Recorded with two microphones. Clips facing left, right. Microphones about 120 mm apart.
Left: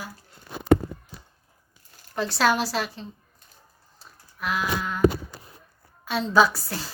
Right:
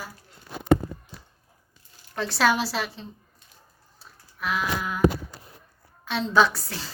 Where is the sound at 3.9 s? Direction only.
Centre (ahead or behind).